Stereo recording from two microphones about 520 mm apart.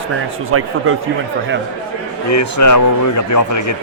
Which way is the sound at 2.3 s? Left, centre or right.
Left.